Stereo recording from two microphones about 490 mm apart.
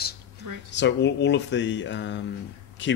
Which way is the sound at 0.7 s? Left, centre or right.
Left.